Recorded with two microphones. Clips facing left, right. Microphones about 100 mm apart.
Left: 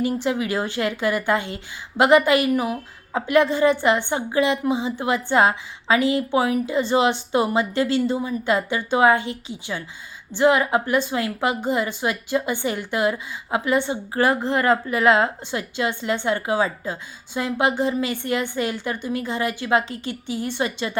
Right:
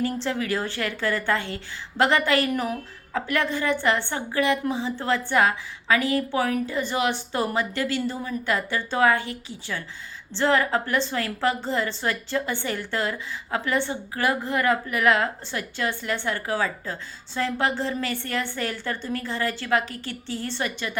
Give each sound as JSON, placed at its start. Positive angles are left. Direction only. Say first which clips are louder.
{"t": 0.0, "sound": "a woman's voice", "louder": "left 4 dB", "side_deg": 15}
{"t": 2.5, "sound": "a woman's voice", "louder": "left 4 dB", "side_deg": 5}
{"t": 3.1, "sound": "a woman's voice", "louder": "left 7 dB", "side_deg": 20}